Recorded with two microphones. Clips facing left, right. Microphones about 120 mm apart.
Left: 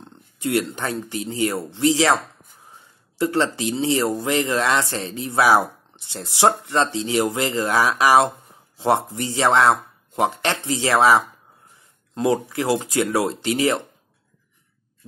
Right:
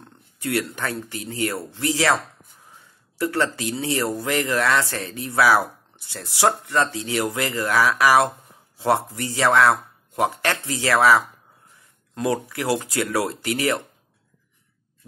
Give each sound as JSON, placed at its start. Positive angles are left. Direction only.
{"t": 0.4, "sound": "speech", "side_deg": 25}
{"t": 3.2, "sound": "speech", "side_deg": 25}